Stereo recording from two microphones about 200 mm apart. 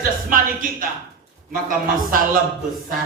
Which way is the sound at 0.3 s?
45° right (ahead or behind).